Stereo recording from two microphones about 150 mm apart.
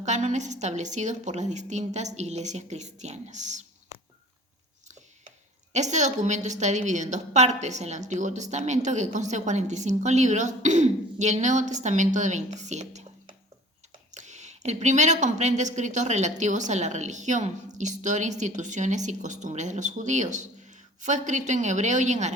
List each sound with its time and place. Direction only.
0.0 s a woman's voice: 50° right (ahead or behind)
5.7 s a woman's voice: 50° right (ahead or behind)
14.1 s a woman's voice: 50° right (ahead or behind)